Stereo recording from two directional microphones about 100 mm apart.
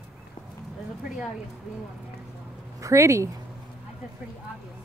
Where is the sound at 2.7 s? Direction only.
30° right (ahead or behind).